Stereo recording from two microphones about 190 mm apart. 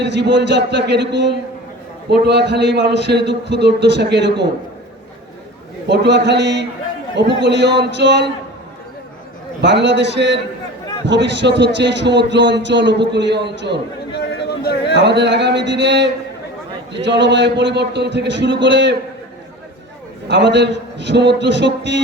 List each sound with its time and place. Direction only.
0.0 s a man's voice: 65° right (ahead or behind)
5.9 s a man's voice: 65° right (ahead or behind)
9.6 s a man's voice: 65° right (ahead or behind)
14.1 s a sound: 60° left (ahead or behind)
14.9 s a man's voice: 65° right (ahead or behind)
17.2 s a man's voice: 65° right (ahead or behind)
20.2 s a man's voice: 65° right (ahead or behind)